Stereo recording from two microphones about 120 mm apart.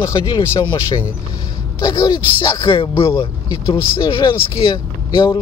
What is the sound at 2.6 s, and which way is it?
Speech, 45° left (ahead or behind).